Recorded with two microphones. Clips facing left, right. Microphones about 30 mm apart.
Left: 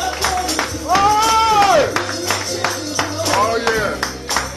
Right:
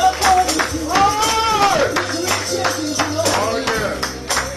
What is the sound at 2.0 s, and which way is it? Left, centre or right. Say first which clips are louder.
Music: right 1 dB; centre.